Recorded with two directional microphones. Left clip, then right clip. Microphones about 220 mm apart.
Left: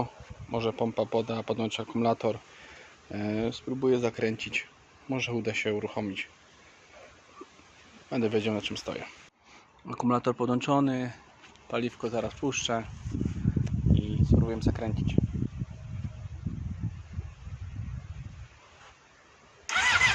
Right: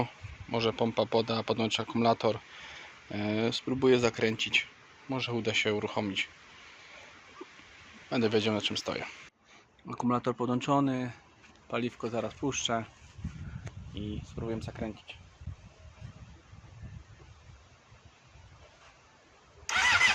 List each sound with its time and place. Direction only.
0.5 s a man's voice: centre (ahead or behind)
3.5 s speech: 10° right (ahead or behind)
4.1 s speech: 5° left (ahead or behind)
5.0 s a man's voice: 20° left (ahead or behind); by 6.2 s 5° left (ahead or behind)
8.1 s a man's voice: 5° left (ahead or behind)
9.8 s a man's voice: 10° left (ahead or behind)
13.7 s a sound: 10° left (ahead or behind); by 15.1 s 30° left (ahead or behind)
19.6 s engine starting: 5° right (ahead or behind)